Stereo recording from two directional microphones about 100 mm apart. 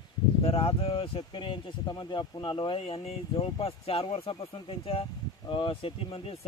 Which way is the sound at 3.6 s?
75° left (ahead or behind).